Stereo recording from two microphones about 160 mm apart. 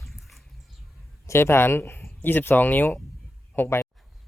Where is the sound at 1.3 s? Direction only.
15° left (ahead or behind).